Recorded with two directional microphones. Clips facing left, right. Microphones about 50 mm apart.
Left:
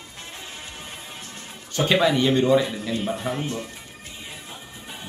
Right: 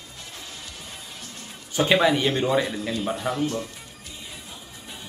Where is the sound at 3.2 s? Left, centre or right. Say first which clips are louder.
Right 2 dB; left.